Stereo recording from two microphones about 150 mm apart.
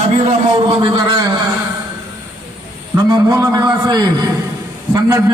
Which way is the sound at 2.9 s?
20° right (ahead or behind).